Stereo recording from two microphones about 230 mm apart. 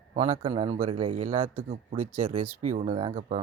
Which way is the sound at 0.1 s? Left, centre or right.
Right.